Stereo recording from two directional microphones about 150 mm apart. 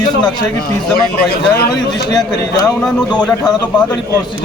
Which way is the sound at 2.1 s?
25° left (ahead or behind).